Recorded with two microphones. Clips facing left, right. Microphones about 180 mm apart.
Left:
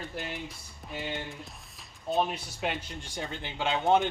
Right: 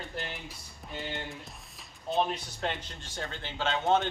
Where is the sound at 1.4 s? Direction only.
Centre (ahead or behind).